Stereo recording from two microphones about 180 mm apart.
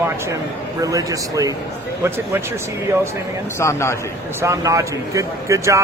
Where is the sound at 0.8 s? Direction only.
20° right (ahead or behind).